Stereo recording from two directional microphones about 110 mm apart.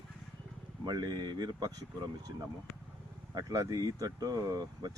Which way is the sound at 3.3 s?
35° right (ahead or behind).